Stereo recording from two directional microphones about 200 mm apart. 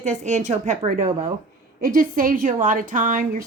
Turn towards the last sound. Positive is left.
turn(degrees=-40)  # may be behind; listen again after turning